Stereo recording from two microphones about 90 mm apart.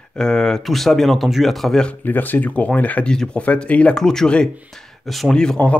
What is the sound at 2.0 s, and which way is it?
Speech, 20° left (ahead or behind).